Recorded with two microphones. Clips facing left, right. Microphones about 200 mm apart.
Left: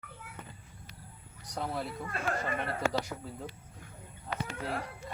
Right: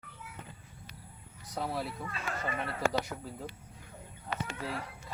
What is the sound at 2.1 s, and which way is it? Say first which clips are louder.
Speech: left 4 dB; 55° left (ahead or behind).